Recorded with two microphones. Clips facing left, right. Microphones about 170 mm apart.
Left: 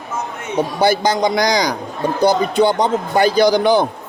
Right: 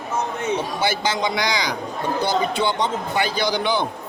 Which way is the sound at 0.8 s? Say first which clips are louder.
Left 7 dB; 40° left (ahead or behind).